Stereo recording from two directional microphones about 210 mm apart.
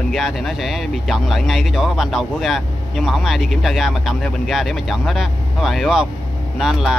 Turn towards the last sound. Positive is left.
turn(degrees=0)  # may be behind; listen again after turning